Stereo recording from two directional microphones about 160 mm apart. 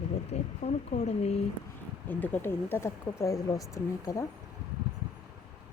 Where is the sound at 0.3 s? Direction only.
40° left (ahead or behind).